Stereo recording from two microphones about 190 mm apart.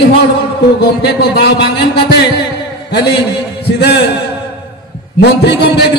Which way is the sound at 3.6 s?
60° left (ahead or behind).